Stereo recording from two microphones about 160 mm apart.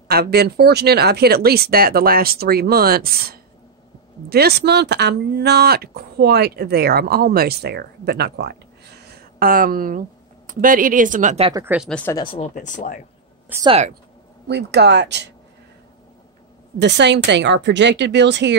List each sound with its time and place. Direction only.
0.1 s speech: 80° right; by 11.3 s 55° right (ahead or behind)
11.7 s speech: 10° right (ahead or behind)
12.1 s speech: 30° left (ahead or behind)
12.7 s speech: 50° left (ahead or behind)
13.7 s speech: 45° right (ahead or behind)
14.5 s speech: 90° right
16.7 s speech: 90° right